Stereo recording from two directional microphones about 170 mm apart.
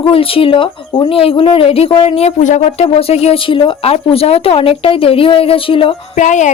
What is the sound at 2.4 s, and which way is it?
Speech, 45° left (ahead or behind).